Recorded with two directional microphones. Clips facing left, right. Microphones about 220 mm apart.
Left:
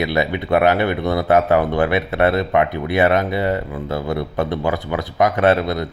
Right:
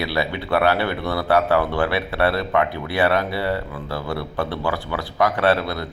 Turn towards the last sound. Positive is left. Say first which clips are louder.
# left 4 dB
turn(degrees=20)  # may be behind; listen again after turning